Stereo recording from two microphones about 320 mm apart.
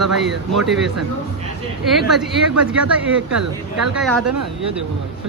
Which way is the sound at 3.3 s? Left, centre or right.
Right.